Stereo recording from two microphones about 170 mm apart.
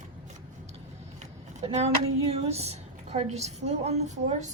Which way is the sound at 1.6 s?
40° right (ahead or behind).